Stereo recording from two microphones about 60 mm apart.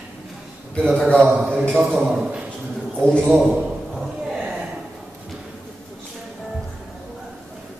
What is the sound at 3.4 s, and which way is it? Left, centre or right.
Speech, centre.